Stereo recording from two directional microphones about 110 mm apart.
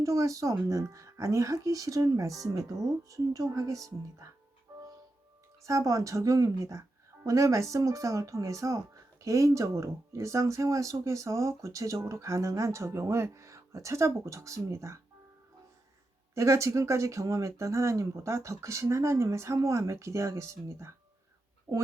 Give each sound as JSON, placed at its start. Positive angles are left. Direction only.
{"t": 0.0, "sound": "speech", "side_deg": -30}
{"t": 5.6, "sound": "speech", "side_deg": -30}
{"t": 16.3, "sound": "speech", "side_deg": -25}
{"t": 21.7, "sound": "speech", "side_deg": -45}